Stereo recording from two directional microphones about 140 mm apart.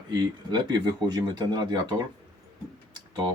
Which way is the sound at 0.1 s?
30° right (ahead or behind).